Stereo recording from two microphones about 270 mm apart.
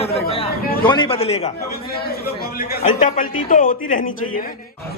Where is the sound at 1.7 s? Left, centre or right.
Left.